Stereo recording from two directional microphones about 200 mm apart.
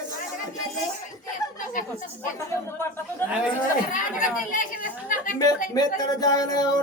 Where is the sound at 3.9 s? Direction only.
40° left (ahead or behind).